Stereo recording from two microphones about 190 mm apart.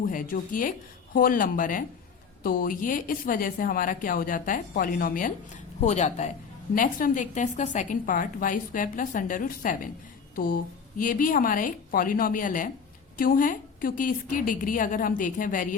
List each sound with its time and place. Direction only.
0.1 s a woman's voice: 45° left (ahead or behind)